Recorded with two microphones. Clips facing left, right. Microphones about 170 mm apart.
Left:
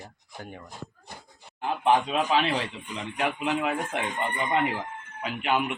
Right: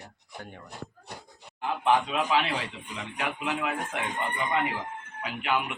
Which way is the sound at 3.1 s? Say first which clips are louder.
Left 4 dB; 30° left (ahead or behind).